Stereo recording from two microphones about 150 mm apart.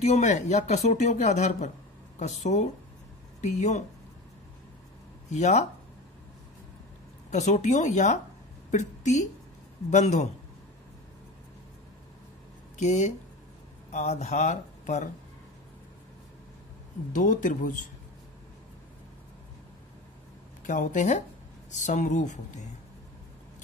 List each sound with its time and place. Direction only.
0.0 s speech: 50° left (ahead or behind)
5.3 s speech: 50° left (ahead or behind)
7.2 s a woman's voice: 50° left (ahead or behind)
12.7 s speech: 50° left (ahead or behind)
17.1 s speech: 60° left (ahead or behind)
20.6 s speech: 55° left (ahead or behind)